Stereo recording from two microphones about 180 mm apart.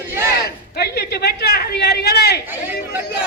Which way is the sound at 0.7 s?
65° left (ahead or behind).